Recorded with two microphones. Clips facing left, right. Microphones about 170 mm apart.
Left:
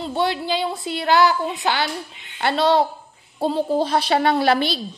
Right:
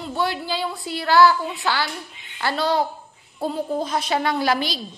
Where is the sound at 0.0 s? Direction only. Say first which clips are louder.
Left 3 dB; 25° left (ahead or behind).